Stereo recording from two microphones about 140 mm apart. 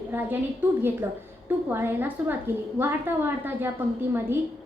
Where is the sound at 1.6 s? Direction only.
15° right (ahead or behind).